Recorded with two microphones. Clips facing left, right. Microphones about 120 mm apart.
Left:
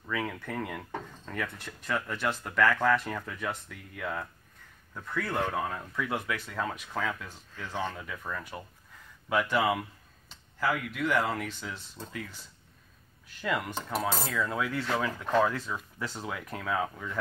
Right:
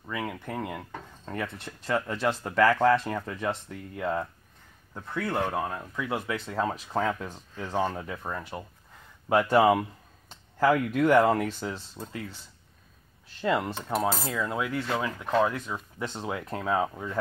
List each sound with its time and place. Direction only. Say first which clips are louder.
0.0 s speech: even; 15° right (ahead or behind); by 2.8 s 35° right (ahead or behind)
2.8 s speech: right 4 dB; 25° right (ahead or behind)
9.3 s speech: right 6 dB; 40° right (ahead or behind)
13.3 s speech: right 5 dB; 30° right (ahead or behind)
14.2 s speech: right 1 dB; 20° right (ahead or behind)